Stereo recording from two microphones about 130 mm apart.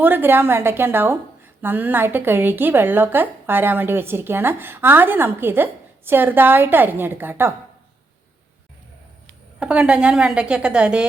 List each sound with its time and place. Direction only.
0.0 s a woman's voice: 15° right (ahead or behind)
9.6 s a woman's voice: 10° right (ahead or behind)